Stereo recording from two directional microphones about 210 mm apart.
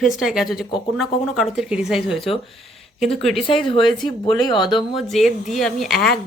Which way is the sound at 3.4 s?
25° left (ahead or behind).